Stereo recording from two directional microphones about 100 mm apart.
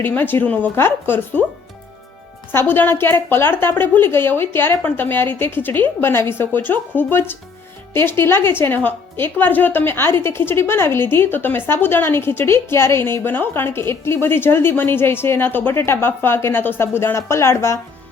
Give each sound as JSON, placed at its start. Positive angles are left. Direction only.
{"t": 0.0, "sound": "speech", "side_deg": 20}
{"t": 2.5, "sound": "speech", "side_deg": 20}